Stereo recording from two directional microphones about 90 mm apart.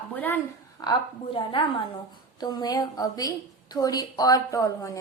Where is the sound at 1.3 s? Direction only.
75° left (ahead or behind).